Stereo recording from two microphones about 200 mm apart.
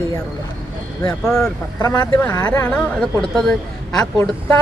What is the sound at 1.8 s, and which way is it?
Speech, 20° left (ahead or behind).